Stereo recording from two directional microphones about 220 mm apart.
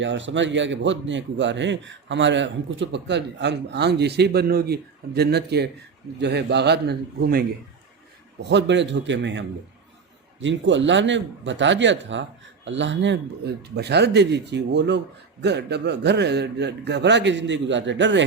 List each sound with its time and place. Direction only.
0.0 s speech: 55° right (ahead or behind)
10.4 s speech: 55° right (ahead or behind)